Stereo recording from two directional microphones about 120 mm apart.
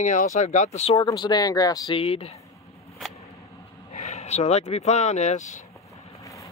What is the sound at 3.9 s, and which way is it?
Speech, 75° left (ahead or behind).